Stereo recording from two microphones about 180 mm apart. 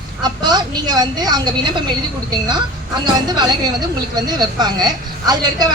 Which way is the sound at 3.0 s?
25° right (ahead or behind).